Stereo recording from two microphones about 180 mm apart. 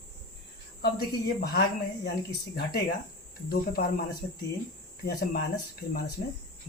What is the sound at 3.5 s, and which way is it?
Speech, 55° left (ahead or behind).